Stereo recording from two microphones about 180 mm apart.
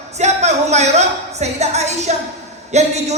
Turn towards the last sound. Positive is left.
turn(degrees=-40)  # may be behind; listen again after turning